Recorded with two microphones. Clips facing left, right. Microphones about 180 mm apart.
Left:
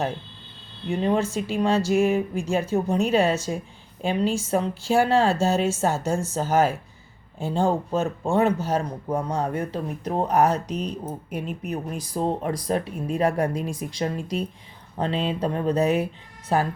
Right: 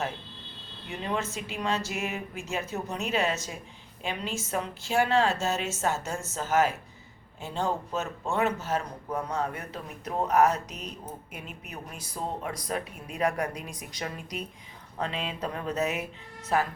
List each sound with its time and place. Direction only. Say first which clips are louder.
0.9 s speech: left 9 dB; 40° left (ahead or behind)